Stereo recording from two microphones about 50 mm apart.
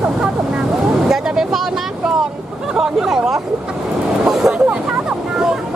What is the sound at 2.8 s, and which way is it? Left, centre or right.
Chatter, centre.